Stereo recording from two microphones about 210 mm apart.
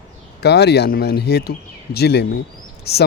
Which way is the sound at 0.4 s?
50° left (ahead or behind).